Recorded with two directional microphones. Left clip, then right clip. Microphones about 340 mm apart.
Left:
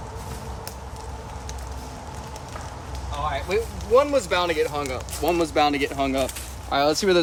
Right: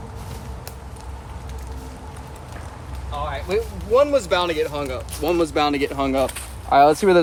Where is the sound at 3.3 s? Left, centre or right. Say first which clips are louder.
Right 3 dB; centre.